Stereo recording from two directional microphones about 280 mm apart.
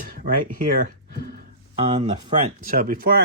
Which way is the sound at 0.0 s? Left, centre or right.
Right.